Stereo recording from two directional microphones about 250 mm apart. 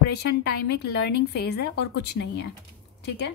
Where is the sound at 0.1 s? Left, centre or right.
Left.